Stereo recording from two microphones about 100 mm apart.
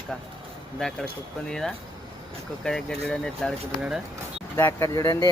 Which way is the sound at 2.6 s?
5° left (ahead or behind).